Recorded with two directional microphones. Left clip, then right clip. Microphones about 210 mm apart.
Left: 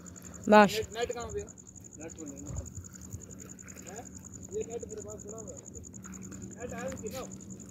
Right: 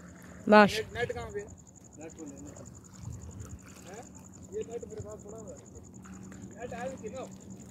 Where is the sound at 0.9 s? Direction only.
35° left (ahead or behind).